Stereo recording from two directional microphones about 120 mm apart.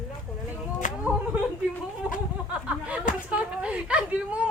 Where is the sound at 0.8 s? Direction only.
90° left.